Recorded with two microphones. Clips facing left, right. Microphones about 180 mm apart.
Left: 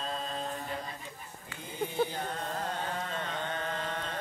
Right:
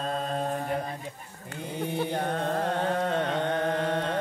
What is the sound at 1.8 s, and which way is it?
Carnatic music, 60° right (ahead or behind).